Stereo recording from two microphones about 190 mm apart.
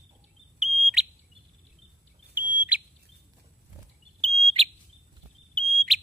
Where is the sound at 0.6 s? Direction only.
Centre (ahead or behind).